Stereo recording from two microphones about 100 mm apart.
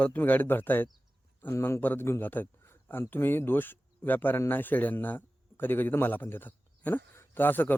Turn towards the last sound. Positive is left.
turn(degrees=20)  # may be behind; listen again after turning